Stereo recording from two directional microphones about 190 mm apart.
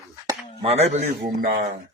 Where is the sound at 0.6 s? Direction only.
35° right (ahead or behind).